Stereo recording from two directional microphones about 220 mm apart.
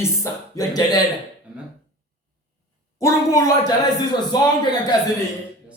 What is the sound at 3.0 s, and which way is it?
Speech, 15° left (ahead or behind).